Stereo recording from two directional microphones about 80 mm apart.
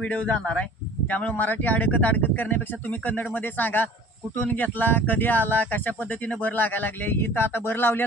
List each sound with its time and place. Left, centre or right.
0.0 s a man's voice: centre